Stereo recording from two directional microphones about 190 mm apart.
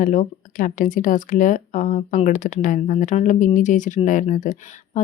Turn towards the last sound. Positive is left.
turn(degrees=40)  # may be behind; listen again after turning